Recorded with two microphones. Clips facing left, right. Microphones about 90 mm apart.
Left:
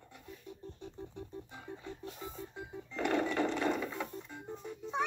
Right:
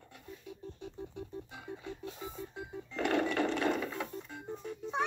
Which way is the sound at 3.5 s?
60° right (ahead or behind).